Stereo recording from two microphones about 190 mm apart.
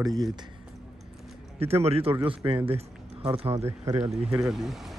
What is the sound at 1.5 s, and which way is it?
Speech, 30° right (ahead or behind).